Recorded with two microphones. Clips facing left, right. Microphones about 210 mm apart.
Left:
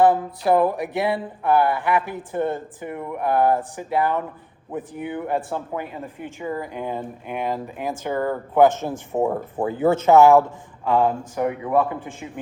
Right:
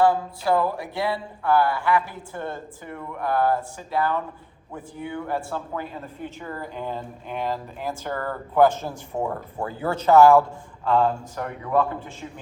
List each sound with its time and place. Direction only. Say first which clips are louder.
0.0 s speech: left 3 dB; 20° left (ahead or behind)
10.8 s speech: left 1 dB; 5° left (ahead or behind)